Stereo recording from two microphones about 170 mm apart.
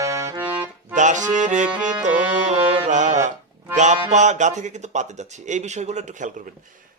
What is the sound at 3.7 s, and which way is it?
Music, 45° right (ahead or behind).